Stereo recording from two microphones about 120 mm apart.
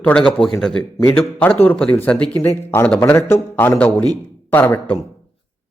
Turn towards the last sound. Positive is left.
turn(degrees=15)  # may be behind; listen again after turning